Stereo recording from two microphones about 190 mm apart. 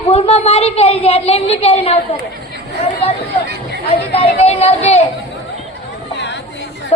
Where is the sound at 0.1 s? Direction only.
35° left (ahead or behind).